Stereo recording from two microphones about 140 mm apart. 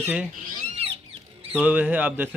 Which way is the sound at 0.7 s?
45° right (ahead or behind).